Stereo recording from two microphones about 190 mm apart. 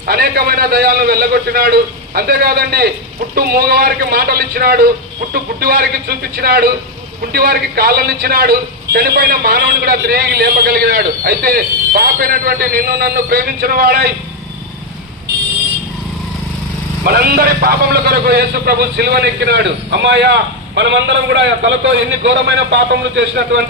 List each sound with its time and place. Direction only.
0.1 s a man's voice: 55° right (ahead or behind)
17.0 s a man's voice: 50° right (ahead or behind)